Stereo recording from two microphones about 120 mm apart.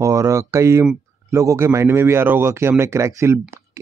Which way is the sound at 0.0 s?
25° right (ahead or behind).